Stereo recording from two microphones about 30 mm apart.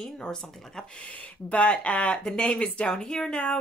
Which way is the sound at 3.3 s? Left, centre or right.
Left.